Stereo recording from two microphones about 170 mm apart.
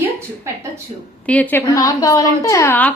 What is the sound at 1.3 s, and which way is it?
A woman's voice, 10° left (ahead or behind).